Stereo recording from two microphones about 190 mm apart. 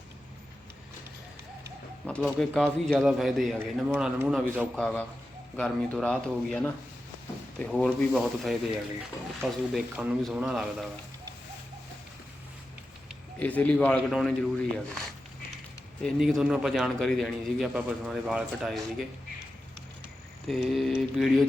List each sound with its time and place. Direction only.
2.0 s a man's voice: 5° left (ahead or behind)
4.7 s a man's voice: 5° left (ahead or behind)
13.4 s a man's voice: 10° left (ahead or behind)
16.0 s a man's voice: centre (ahead or behind)
20.5 s a man's voice: centre (ahead or behind)